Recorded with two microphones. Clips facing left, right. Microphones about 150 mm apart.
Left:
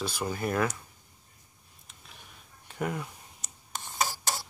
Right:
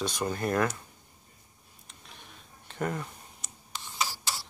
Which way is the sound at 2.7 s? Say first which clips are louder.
Even; 5° left (ahead or behind).